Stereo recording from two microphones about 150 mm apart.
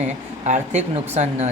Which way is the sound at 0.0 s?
50° right (ahead or behind).